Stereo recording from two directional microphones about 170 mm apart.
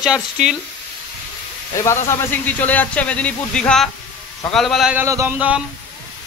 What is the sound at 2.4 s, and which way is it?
A man's voice, 10° left (ahead or behind).